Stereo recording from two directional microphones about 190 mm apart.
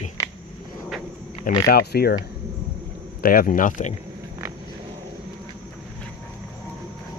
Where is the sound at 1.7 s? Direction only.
55° left (ahead or behind).